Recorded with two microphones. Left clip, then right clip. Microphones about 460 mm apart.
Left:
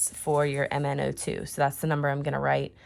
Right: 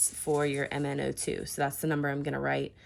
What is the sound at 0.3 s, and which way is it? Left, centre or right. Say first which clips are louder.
Speech: left 4 dB; left.